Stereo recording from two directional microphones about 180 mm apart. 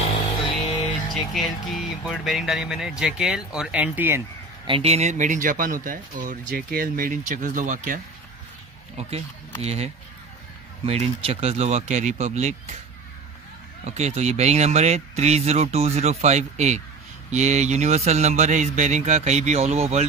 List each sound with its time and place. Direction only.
1.1 s speech: centre (ahead or behind)
4.6 s speech: 30° right (ahead or behind)
8.9 s speech: 35° right (ahead or behind)
10.9 s speech: 35° right (ahead or behind)
13.8 s speech: 40° right (ahead or behind)